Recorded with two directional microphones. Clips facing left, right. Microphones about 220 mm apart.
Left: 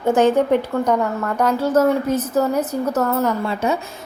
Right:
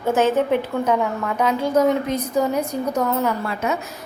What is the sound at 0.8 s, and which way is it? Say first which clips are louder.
A woman's voice: left 1 dB; 5° right (ahead or behind).